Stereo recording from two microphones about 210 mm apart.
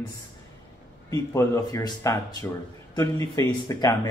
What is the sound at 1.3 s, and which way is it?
Speech, 15° left (ahead or behind).